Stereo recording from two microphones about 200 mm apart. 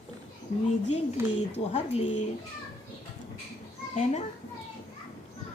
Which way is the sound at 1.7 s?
30° left (ahead or behind).